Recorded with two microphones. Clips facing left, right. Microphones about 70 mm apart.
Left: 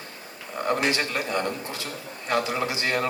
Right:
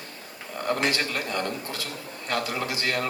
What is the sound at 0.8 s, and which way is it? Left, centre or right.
A man's voice, left.